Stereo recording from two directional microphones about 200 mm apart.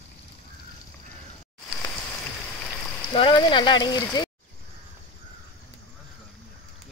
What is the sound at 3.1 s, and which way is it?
Speech, 25° left (ahead or behind).